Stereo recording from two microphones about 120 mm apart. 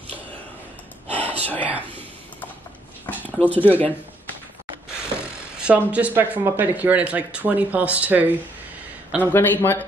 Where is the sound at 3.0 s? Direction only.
15° left (ahead or behind).